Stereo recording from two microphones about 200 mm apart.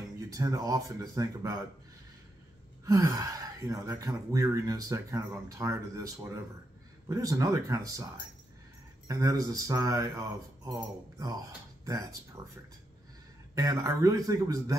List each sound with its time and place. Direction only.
0.2 s speech: 15° right (ahead or behind)
2.8 s speech: 15° right (ahead or behind)
11.8 s speech: 15° right (ahead or behind)
13.6 s speech: 15° right (ahead or behind)